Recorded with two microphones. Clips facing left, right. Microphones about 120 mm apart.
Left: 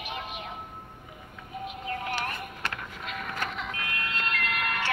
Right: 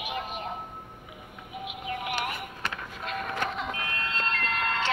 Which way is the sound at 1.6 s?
10° right (ahead or behind).